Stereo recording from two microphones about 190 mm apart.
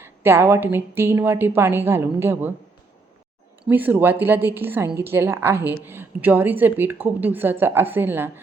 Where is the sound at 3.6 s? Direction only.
10° right (ahead or behind).